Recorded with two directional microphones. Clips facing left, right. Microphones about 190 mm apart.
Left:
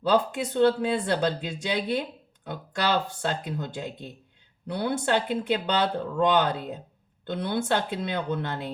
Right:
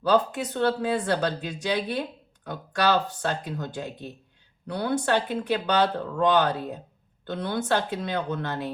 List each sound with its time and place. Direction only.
0.1 s speech: 25° left (ahead or behind)